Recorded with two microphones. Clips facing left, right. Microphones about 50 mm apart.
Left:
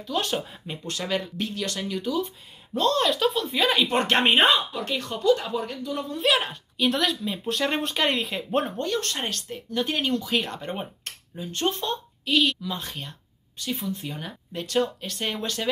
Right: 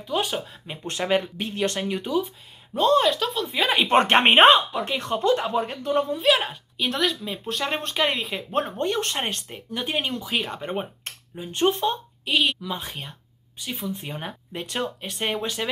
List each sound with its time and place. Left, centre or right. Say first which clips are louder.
0.0 s speech: right 1 dB; centre
0.8 s speech: right 5 dB; right
2.2 s speech: even; centre
3.1 s speech: even; centre
3.7 s speech: right 7 dB; right
4.8 s speech: even; right
6.1 s speech: right 2 dB; centre
8.7 s speech: right 2 dB; right
13.9 s speech: right 1 dB; right